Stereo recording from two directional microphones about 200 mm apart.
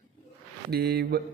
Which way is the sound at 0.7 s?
55° right (ahead or behind).